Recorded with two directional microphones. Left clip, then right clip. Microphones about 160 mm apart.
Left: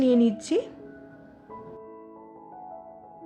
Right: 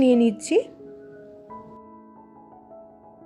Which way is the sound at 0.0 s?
25° right (ahead or behind).